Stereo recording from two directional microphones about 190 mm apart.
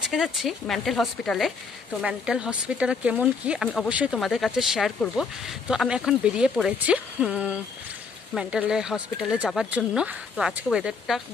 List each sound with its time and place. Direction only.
0.0 s speech: centre (ahead or behind)